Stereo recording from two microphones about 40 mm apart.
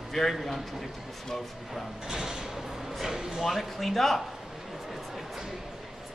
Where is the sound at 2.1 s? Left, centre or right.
Centre.